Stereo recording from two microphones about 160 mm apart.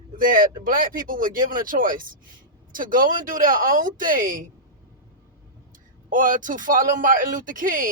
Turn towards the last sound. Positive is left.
turn(degrees=-55)  # may be behind; listen again after turning